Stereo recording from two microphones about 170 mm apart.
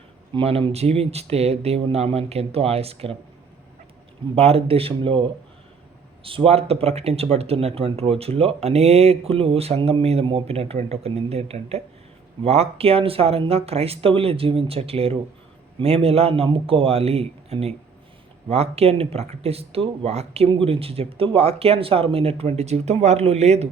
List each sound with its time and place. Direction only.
0.3 s speech: 30° right (ahead or behind)
4.4 s speech: 35° right (ahead or behind)